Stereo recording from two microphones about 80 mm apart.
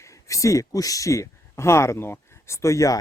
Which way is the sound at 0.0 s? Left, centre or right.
Left.